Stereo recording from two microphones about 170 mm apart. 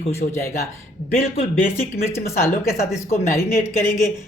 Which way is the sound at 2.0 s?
15° left (ahead or behind).